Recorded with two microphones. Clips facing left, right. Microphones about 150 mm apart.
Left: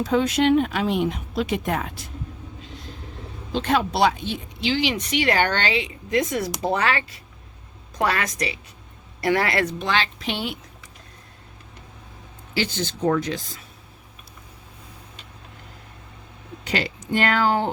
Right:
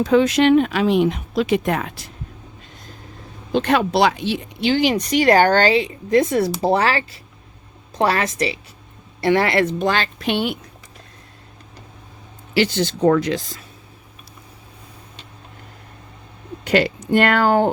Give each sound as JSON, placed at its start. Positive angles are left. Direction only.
{"t": 0.0, "sound": "speech", "side_deg": -80}
{"t": 2.6, "sound": "vehicle", "side_deg": -45}
{"t": 3.5, "sound": "speech", "side_deg": -65}
{"t": 9.7, "sound": "speech", "side_deg": -45}
{"t": 12.5, "sound": "speech", "side_deg": -75}
{"t": 16.6, "sound": "speech", "side_deg": -60}